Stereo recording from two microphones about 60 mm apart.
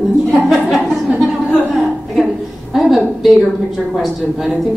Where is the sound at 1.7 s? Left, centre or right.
Centre.